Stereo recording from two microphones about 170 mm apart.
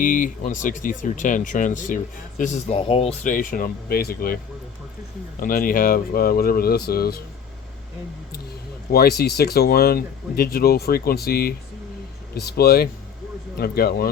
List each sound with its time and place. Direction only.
0.0 s speech: 50° left (ahead or behind)
2.7 s speech: 35° left (ahead or behind)
3.3 s speech: 55° left (ahead or behind)
5.4 s speech: 55° left (ahead or behind)
8.9 s speech: 65° left (ahead or behind)